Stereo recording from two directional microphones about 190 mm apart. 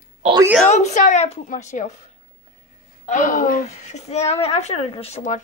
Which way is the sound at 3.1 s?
45° left (ahead or behind).